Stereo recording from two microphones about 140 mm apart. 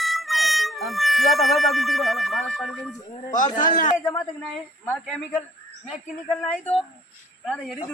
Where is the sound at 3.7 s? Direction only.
70° left (ahead or behind).